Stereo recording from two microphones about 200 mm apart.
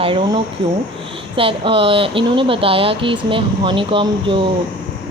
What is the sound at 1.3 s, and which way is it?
Speech, 25° right (ahead or behind).